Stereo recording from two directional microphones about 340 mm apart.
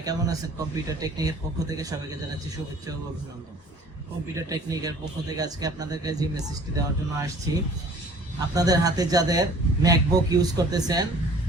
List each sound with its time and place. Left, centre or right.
0.0 s speech: centre
4.4 s speech: centre